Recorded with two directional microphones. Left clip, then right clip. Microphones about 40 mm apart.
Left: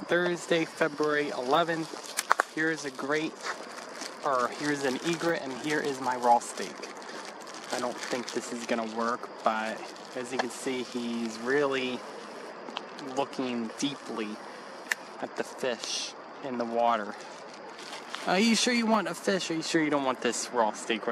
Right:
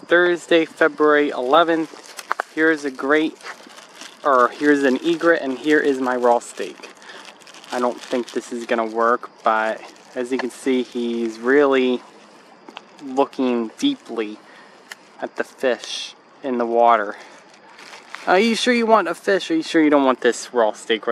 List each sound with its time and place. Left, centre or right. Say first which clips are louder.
0.1 s speech: right 12 dB; right
2.5 s speech: right 12 dB; right
4.0 s speech: right 12 dB; right
8.4 s speech: right 10 dB; right
8.8 s speech: right 12 dB; right
9.1 s speech: right 11 dB; right
13.1 s speech: right 12 dB; right
16.8 s speech: right 12 dB; right
18.1 s speech: right 10 dB; right